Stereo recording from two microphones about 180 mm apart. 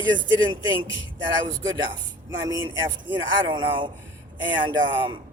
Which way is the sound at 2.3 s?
20° right (ahead or behind).